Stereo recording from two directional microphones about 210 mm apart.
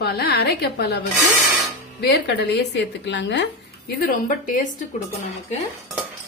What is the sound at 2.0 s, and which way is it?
A woman's voice, 50° left (ahead or behind).